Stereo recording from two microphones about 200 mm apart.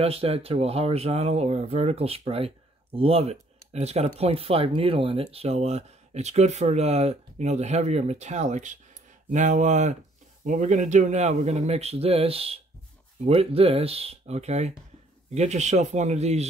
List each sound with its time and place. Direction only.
0.0 s speech: 30° right (ahead or behind)